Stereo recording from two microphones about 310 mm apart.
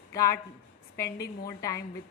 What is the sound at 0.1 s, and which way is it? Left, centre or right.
Speech, centre.